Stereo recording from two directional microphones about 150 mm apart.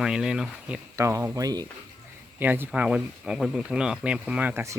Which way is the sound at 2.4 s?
10° right (ahead or behind).